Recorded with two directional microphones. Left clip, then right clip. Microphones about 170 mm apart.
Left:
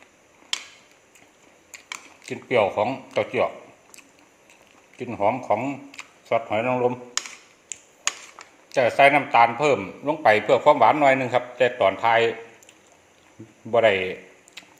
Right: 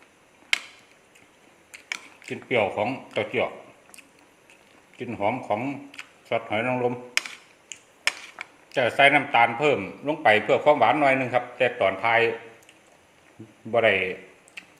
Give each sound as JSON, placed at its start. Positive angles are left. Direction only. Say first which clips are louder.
{"t": 1.7, "sound": "speech", "louder": "right 3 dB", "side_deg": 10}
{"t": 4.9, "sound": "speech", "louder": "left 3 dB", "side_deg": 10}
{"t": 8.7, "sound": "a man's voice", "louder": "left 2 dB", "side_deg": 10}
{"t": 13.7, "sound": "a man's voice", "louder": "left 2 dB", "side_deg": 20}